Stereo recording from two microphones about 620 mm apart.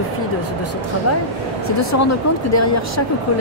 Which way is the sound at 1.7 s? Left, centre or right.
Left.